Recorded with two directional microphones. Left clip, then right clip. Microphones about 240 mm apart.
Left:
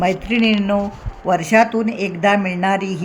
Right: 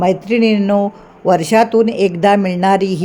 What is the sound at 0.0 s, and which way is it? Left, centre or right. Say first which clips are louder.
Speech: right 4 dB; right.